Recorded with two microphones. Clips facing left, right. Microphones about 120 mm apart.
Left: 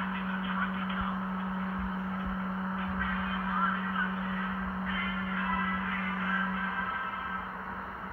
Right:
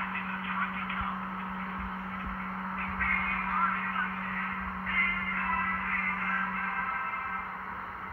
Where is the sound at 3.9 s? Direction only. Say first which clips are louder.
Left 1 dB; 10° left (ahead or behind).